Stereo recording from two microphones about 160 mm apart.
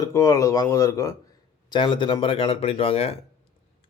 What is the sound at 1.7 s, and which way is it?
A man's voice, 30° left (ahead or behind).